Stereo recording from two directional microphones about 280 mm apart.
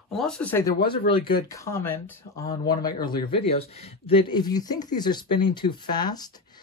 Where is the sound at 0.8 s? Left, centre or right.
Centre.